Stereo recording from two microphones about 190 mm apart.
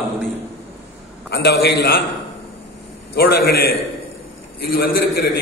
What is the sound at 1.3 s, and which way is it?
Speech, 60° left (ahead or behind).